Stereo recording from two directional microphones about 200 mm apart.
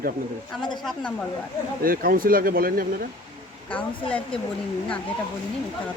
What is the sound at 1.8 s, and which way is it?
Speech, 45° right (ahead or behind).